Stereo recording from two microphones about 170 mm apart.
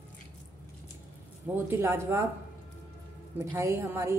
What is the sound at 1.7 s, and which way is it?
Speech, 15° right (ahead or behind).